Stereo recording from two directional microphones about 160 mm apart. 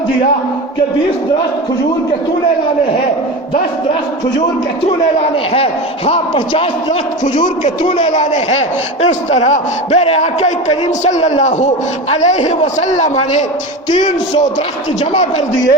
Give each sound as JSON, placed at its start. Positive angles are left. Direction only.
{"t": 6.1, "sound": "speech", "side_deg": 35}
{"t": 7.3, "sound": "a man's voice", "side_deg": 50}
{"t": 15.1, "sound": "a man's voice", "side_deg": 50}